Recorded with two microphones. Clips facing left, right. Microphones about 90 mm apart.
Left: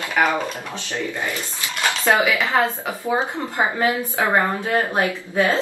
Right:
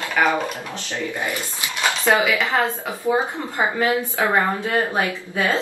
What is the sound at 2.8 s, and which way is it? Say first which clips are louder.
Speech: right 1 dB; 15° left (ahead or behind).